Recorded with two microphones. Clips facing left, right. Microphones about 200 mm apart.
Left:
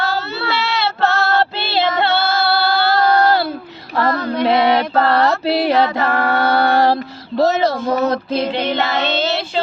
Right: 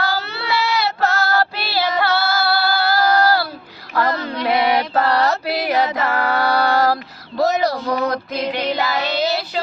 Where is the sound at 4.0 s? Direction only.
25° left (ahead or behind).